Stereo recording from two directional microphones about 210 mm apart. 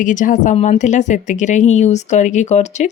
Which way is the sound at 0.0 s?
40° left (ahead or behind).